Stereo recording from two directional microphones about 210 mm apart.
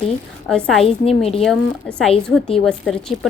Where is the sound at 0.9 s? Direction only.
30° left (ahead or behind).